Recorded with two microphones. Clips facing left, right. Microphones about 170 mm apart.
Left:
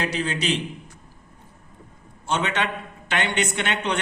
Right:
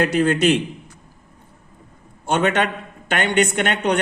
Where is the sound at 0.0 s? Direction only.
50° right (ahead or behind).